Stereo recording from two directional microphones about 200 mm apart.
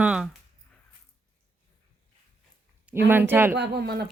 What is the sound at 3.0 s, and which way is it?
Speech, 10° right (ahead or behind).